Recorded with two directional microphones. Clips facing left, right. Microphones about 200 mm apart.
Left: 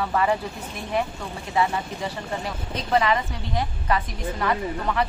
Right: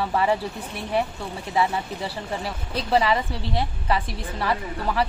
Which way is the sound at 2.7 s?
30° right (ahead or behind).